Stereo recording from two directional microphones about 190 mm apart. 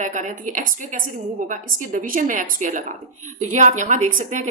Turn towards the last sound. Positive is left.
turn(degrees=-40)  # may be behind; listen again after turning